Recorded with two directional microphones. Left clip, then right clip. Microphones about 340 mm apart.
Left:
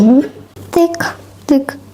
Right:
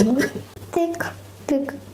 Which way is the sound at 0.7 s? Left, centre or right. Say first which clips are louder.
Left 10 dB; left.